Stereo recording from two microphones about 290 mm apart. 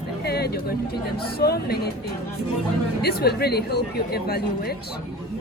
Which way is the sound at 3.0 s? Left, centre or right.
Left.